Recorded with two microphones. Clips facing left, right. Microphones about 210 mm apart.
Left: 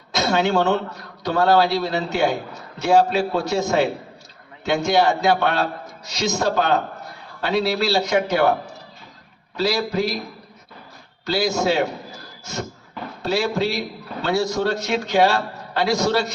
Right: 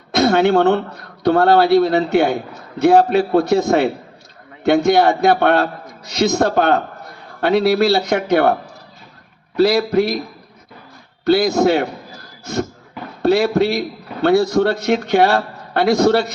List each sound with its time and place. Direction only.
0.1 s a man's voice: 60° right (ahead or behind)
9.6 s a man's voice: 60° right (ahead or behind)
11.3 s a man's voice: 60° right (ahead or behind)